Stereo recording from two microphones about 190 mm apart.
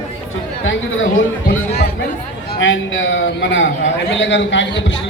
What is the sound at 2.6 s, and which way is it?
A man's voice, 80° left.